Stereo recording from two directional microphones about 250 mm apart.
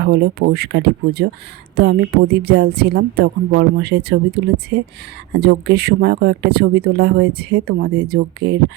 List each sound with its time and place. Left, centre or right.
0.0 s speech: right